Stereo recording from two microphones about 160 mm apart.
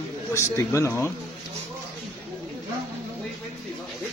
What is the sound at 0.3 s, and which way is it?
Speech, 15° left (ahead or behind).